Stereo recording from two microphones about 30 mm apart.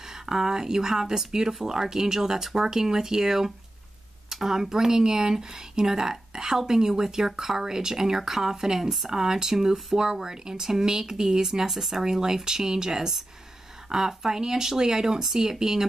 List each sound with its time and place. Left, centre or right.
0.1 s speech: centre
11.7 s speech: centre
12.0 s speech: centre